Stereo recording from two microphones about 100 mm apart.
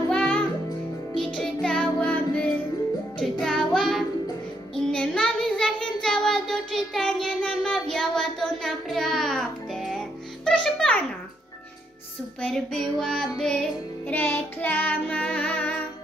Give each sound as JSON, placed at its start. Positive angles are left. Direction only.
{"t": 0.1, "sound": "music", "side_deg": 10}
{"t": 3.4, "sound": "child singing", "side_deg": 5}
{"t": 3.8, "sound": "music", "side_deg": 0}
{"t": 4.7, "sound": "child singing", "side_deg": 5}
{"t": 10.4, "sound": "music", "side_deg": 10}
{"t": 12.4, "sound": "child singing", "side_deg": 5}
{"t": 14.1, "sound": "child singing", "side_deg": 20}